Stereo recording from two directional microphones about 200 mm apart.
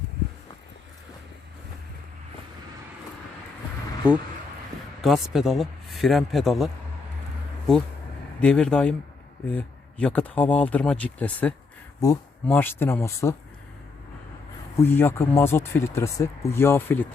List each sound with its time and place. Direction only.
4.0 s speech: 5° right (ahead or behind)
8.4 s speech: 5° left (ahead or behind)
11.9 s speech: 15° left (ahead or behind)
14.8 s speech: 10° left (ahead or behind)